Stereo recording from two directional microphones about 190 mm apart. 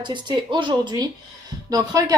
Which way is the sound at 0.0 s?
25° right (ahead or behind).